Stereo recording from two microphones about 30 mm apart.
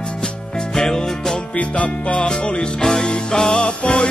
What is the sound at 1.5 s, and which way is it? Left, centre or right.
Music, left.